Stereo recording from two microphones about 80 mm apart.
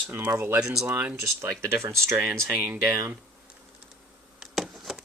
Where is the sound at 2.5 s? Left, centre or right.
Right.